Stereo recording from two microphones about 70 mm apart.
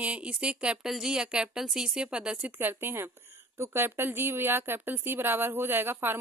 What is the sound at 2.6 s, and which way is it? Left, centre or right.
Speech, right.